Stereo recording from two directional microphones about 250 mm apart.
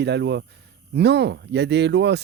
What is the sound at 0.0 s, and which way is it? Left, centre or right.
Speech, right.